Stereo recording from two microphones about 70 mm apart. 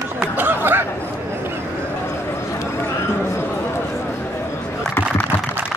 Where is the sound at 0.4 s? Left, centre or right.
Right.